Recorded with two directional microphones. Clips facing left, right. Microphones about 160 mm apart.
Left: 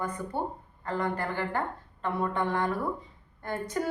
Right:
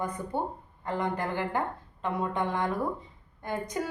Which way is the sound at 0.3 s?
20° right (ahead or behind).